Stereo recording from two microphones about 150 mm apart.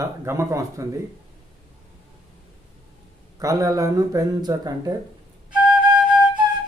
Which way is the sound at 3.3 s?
25° right (ahead or behind).